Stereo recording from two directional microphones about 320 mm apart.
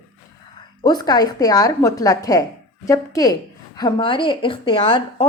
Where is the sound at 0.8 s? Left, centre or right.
Centre.